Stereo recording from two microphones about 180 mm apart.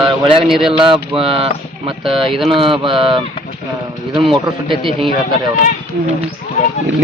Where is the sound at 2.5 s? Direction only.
30° right (ahead or behind).